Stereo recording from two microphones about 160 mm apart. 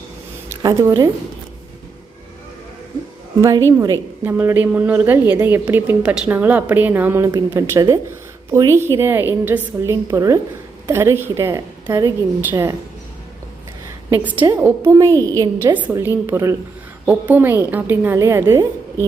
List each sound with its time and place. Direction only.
0.5 s speech: 20° right (ahead or behind)
3.7 s a woman's voice: 20° right (ahead or behind)
14.1 s a woman's voice: 10° right (ahead or behind)